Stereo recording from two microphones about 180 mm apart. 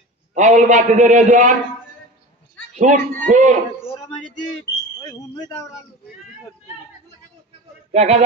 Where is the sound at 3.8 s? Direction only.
30° left (ahead or behind).